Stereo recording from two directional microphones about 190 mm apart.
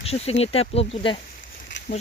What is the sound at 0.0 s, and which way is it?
Speech, 30° left (ahead or behind).